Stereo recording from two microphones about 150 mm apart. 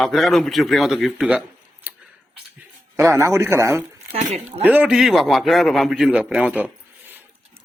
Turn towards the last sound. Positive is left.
turn(degrees=-10)  # may be behind; listen again after turning